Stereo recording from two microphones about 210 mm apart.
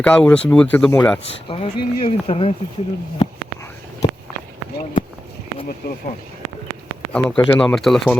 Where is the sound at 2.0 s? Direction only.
25° left (ahead or behind).